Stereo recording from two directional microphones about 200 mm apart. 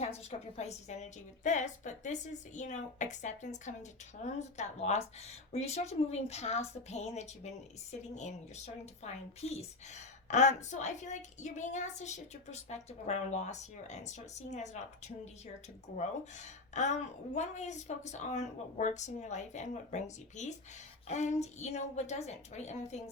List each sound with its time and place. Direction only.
0.0 s speech: 30° left (ahead or behind)